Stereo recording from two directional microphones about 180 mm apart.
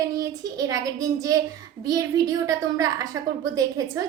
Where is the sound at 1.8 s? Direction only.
20° right (ahead or behind).